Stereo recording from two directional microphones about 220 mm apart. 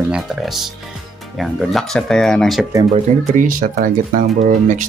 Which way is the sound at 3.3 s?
40° right (ahead or behind).